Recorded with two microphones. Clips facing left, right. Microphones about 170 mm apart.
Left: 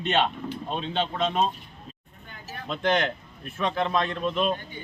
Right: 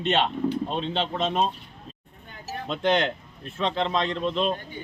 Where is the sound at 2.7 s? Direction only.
Centre (ahead or behind).